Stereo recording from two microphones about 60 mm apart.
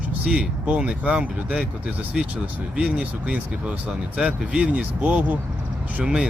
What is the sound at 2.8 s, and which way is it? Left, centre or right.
Speech, centre.